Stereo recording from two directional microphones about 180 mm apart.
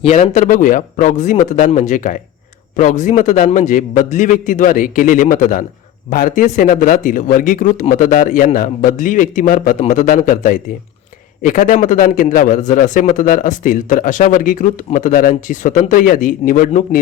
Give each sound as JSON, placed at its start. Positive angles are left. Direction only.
{"t": 0.0, "sound": "a man's voice", "side_deg": 40}